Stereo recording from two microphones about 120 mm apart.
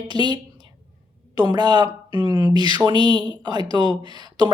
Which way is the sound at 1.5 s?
35° right (ahead or behind).